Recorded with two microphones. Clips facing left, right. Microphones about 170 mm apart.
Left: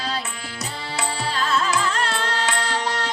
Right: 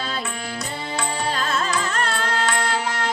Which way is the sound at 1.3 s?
45° right (ahead or behind).